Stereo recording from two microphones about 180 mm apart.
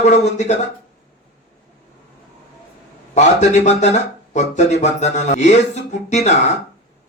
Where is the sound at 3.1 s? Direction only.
40° left (ahead or behind).